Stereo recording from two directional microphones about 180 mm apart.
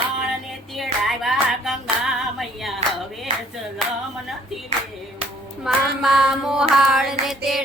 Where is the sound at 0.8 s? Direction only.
Centre (ahead or behind).